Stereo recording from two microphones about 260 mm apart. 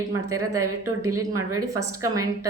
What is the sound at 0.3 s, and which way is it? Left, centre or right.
Speech, right.